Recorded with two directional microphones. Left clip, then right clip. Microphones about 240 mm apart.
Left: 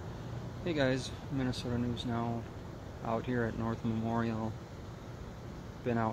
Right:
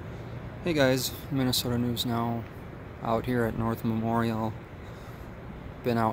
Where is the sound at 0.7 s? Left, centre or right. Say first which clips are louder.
Right 8 dB; right.